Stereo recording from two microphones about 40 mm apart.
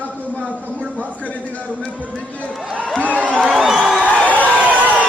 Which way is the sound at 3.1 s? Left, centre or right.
Right.